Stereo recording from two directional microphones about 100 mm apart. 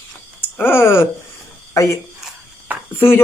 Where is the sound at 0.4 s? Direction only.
20° left (ahead or behind).